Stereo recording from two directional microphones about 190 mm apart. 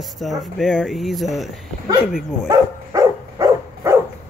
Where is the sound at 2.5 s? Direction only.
20° right (ahead or behind).